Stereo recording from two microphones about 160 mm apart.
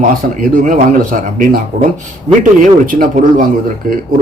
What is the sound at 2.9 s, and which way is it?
A man's voice, 60° right (ahead or behind).